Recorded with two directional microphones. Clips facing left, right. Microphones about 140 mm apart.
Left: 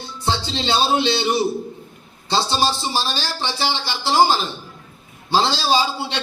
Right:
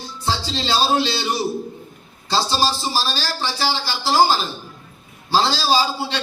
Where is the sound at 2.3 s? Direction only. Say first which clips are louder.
Even; 20° left (ahead or behind).